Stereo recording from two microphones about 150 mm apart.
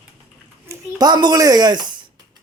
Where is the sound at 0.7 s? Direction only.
25° right (ahead or behind).